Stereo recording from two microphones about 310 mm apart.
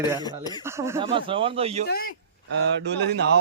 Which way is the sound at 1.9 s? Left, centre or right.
Left.